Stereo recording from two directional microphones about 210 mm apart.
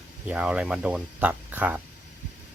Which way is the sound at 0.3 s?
5° right (ahead or behind).